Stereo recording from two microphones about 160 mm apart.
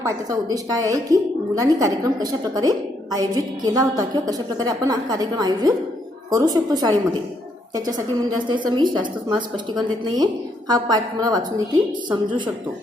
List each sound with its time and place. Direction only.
0.0 s a woman's voice: 20° right (ahead or behind)